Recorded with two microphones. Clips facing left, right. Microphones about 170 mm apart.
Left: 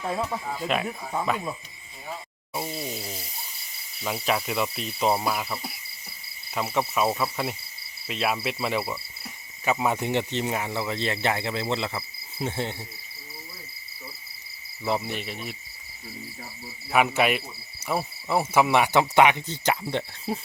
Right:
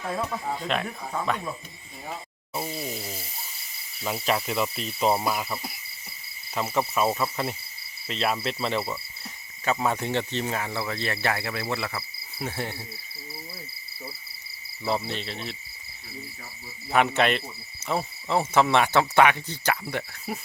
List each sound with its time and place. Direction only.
0.6 s speech: 5° left (ahead or behind)
2.5 s a sound: centre (ahead or behind)
4.0 s speech: centre (ahead or behind); by 12.7 s 20° left (ahead or behind)
14.8 s cricket: 15° left (ahead or behind)
16.9 s cricket: 5° left (ahead or behind)